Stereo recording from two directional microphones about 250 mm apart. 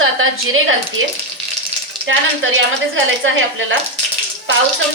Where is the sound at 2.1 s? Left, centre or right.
Right.